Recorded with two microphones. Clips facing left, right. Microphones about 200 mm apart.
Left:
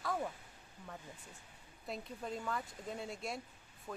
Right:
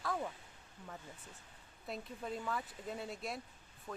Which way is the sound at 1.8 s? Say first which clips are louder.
Even; centre (ahead or behind).